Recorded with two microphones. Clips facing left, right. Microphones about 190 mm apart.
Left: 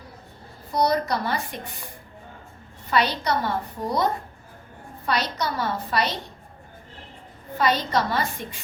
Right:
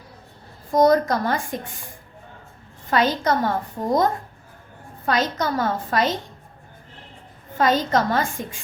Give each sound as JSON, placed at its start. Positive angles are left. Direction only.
{"t": 0.7, "sound": "a woman's voice", "side_deg": -45}
{"t": 2.9, "sound": "a woman's voice", "side_deg": -45}
{"t": 5.2, "sound": "a woman's voice", "side_deg": -45}
{"t": 7.6, "sound": "a woman's voice", "side_deg": -45}